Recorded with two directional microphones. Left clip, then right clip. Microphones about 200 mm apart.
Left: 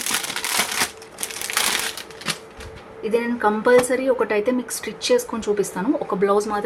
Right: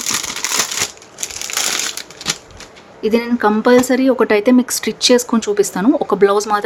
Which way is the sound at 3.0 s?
45° right (ahead or behind).